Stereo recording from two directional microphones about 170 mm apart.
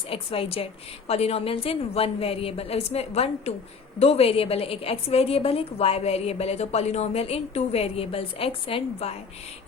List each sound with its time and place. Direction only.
0.1 s a woman's voice: 35° left (ahead or behind)